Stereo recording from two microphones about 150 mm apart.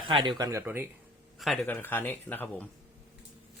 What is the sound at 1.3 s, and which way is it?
Speech, centre (ahead or behind).